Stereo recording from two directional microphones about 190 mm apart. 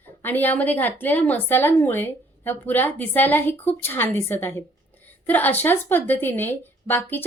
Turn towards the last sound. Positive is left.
turn(degrees=10)  # may be behind; listen again after turning